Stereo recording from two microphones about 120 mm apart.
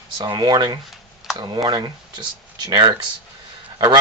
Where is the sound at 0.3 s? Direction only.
40° right (ahead or behind).